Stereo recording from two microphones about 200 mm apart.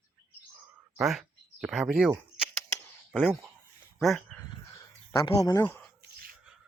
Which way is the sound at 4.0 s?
Centre (ahead or behind).